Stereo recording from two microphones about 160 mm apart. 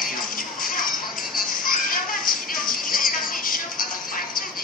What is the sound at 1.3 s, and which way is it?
Music, 60° left (ahead or behind).